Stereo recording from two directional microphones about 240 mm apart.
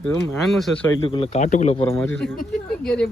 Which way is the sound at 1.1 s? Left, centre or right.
Left.